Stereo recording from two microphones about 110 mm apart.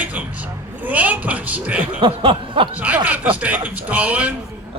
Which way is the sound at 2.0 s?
50° right (ahead or behind).